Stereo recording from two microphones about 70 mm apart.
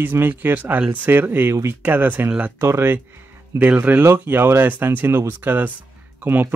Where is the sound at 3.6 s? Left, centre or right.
Right.